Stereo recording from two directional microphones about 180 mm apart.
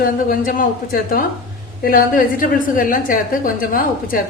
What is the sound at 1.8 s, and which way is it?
A woman's voice, 50° left (ahead or behind).